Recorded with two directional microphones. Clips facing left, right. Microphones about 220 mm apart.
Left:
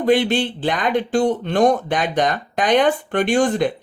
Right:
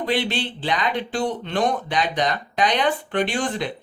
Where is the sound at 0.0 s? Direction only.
50° left (ahead or behind).